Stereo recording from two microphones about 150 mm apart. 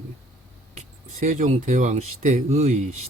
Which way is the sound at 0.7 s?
50° right (ahead or behind).